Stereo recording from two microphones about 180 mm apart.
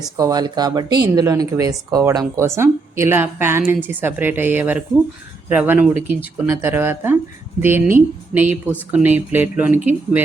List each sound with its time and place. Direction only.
0.2 s a woman's voice: 20° right (ahead or behind)